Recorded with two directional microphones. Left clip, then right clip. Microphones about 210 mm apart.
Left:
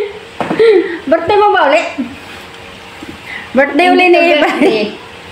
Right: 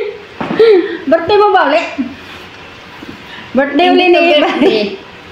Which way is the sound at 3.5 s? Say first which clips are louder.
Left 1 dB; 25° left (ahead or behind).